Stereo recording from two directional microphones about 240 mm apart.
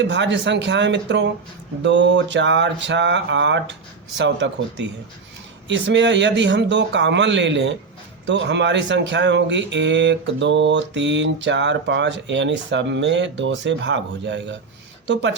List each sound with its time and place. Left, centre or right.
0.0 s speech: right